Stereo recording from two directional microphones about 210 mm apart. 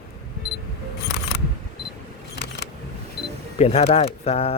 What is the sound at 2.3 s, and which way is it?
Vehicle, 50° left (ahead or behind).